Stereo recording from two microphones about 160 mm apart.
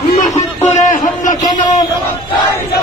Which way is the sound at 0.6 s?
50° left (ahead or behind).